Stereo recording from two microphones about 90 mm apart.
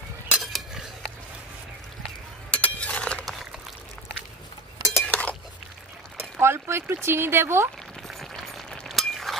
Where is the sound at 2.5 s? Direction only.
15° left (ahead or behind).